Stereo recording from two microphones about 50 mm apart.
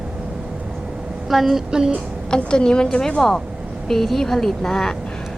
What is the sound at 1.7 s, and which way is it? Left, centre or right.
Speech, centre.